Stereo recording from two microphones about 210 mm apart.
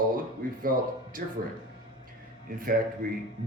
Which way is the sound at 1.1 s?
40° right (ahead or behind).